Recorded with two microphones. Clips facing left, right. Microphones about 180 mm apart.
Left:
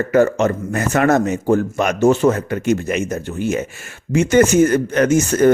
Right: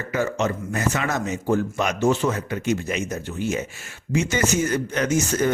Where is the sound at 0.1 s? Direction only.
50° left (ahead or behind).